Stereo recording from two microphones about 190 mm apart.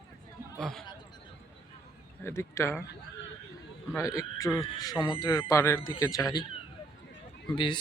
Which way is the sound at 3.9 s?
15° left (ahead or behind).